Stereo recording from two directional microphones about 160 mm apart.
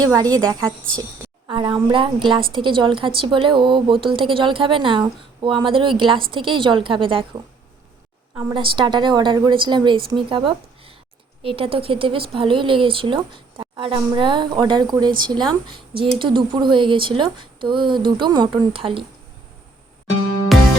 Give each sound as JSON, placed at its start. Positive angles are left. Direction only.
{"t": 0.0, "sound": "a woman's voice", "side_deg": -25}
{"t": 8.5, "sound": "a woman's voice", "side_deg": -30}
{"t": 20.5, "sound": "music", "side_deg": 0}